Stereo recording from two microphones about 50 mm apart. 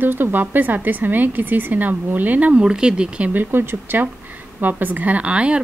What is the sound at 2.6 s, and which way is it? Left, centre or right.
Speech, centre.